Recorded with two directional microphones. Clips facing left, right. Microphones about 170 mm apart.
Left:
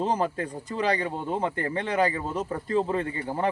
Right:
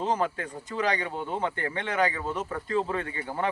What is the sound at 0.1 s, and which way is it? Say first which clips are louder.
Speech: left 1 dB; 35° left (ahead or behind).